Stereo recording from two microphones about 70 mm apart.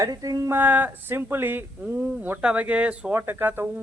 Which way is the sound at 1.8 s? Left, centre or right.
Right.